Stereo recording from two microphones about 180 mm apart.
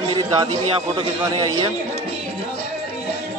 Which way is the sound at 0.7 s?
30° right (ahead or behind).